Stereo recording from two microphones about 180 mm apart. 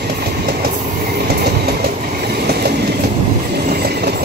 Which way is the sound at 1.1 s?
60° right (ahead or behind).